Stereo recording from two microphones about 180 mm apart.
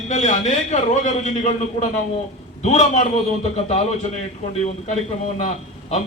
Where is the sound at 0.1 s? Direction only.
40° left (ahead or behind).